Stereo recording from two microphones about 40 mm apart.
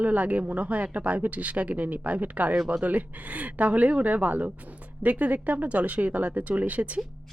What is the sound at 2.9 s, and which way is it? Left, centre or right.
Speech, right.